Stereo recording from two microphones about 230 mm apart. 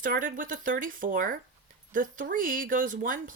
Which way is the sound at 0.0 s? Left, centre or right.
Right.